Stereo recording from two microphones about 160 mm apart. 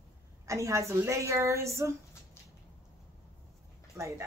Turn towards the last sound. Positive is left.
turn(degrees=-20)  # may be behind; listen again after turning